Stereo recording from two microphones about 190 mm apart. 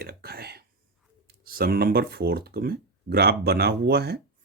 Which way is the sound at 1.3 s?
50° right (ahead or behind).